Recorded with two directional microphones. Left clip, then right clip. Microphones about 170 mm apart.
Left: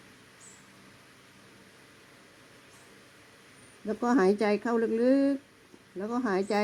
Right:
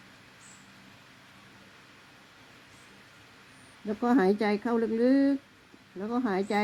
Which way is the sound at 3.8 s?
30° left (ahead or behind).